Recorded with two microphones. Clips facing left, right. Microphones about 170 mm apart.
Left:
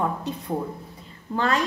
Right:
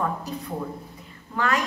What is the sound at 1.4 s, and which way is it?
Speech, 30° left (ahead or behind).